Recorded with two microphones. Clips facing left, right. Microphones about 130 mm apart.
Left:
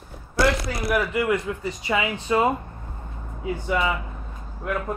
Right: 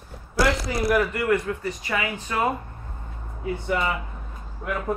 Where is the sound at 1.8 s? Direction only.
20° left (ahead or behind).